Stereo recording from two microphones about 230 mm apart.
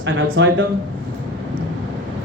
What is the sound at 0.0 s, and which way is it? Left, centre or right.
Speech, right.